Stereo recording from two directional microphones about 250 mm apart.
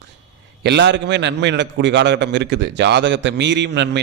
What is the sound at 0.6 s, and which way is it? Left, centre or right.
A man's voice, right.